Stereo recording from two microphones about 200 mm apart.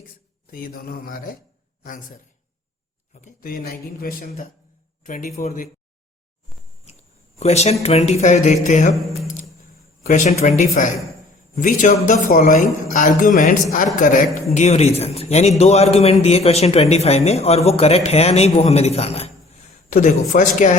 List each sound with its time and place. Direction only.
0.5 s a man's voice: 45° left (ahead or behind)
7.3 s a man's voice: 35° left (ahead or behind)
9.2 s a sound: 40° left (ahead or behind)
10.1 s a man's voice: 35° left (ahead or behind)